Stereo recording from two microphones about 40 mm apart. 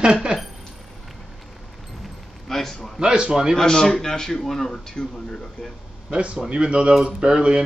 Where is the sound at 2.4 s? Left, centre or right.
Centre.